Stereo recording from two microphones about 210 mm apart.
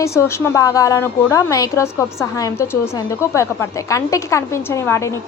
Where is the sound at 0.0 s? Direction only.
15° left (ahead or behind).